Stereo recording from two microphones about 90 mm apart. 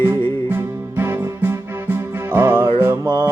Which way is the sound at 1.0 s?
25° right (ahead or behind).